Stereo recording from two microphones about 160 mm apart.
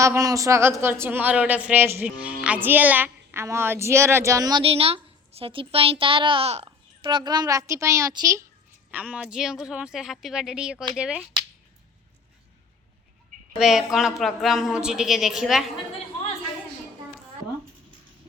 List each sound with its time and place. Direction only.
0.0 s speech: 20° right (ahead or behind)
4.6 s a woman's voice: 35° right (ahead or behind)
6.7 s speech: 30° right (ahead or behind)
8.9 s speech: 10° right (ahead or behind)
13.6 s speech: centre (ahead or behind)